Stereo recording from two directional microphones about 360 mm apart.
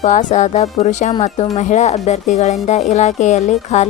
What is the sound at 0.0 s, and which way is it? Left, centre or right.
Speech, left.